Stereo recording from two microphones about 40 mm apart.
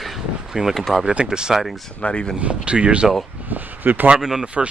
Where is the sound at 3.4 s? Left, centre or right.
Right.